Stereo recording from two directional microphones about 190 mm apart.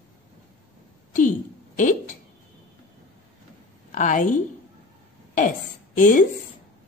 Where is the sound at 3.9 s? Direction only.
40° left (ahead or behind).